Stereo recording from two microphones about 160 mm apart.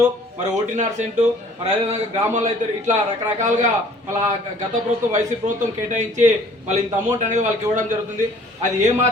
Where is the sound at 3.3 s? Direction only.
50° right (ahead or behind).